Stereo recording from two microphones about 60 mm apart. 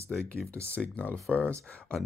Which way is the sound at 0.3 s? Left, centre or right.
Left.